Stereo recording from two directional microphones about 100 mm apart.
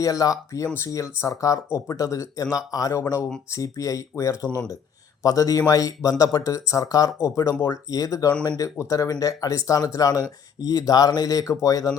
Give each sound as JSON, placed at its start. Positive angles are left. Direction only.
{"t": 0.0, "sound": "speech", "side_deg": 35}
{"t": 4.4, "sound": "speech", "side_deg": 10}
{"t": 5.2, "sound": "speech", "side_deg": 35}